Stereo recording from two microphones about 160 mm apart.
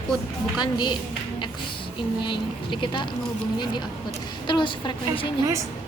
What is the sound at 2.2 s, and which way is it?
Speech, 30° left (ahead or behind).